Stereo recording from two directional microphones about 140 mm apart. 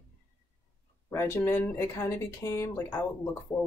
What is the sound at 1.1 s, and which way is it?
Speech, 20° left (ahead or behind).